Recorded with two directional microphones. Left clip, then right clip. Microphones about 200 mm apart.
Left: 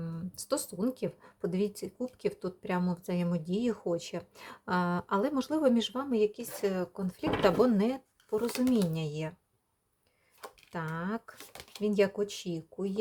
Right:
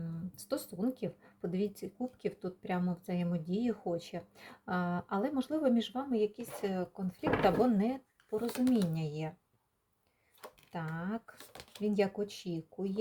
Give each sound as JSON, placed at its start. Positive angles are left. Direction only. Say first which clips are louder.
{"t": 0.0, "sound": "speech", "louder": "left 4 dB", "side_deg": 25}
{"t": 8.4, "sound": "speech", "louder": "even", "side_deg": 0}
{"t": 8.9, "sound": "speech", "louder": "left 3 dB", "side_deg": 25}
{"t": 10.7, "sound": "speech", "louder": "left 4 dB", "side_deg": 25}